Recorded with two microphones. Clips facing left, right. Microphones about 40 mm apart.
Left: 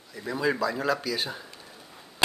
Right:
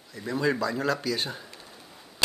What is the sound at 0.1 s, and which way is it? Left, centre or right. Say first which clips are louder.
Speech: right 1 dB; centre.